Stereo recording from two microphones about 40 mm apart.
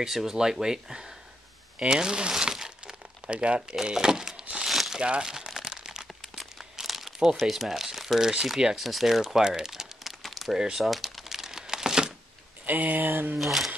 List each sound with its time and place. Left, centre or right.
0.0 s speech: centre
3.3 s speech: right
3.8 s speech: centre
4.6 s crumpling: centre
4.9 s speech: right
5.2 s crumpling: centre
7.3 s speech: centre
10.2 s a sound: centre
10.8 s crumpling: centre
12.6 s speech: right
13.4 s speech: centre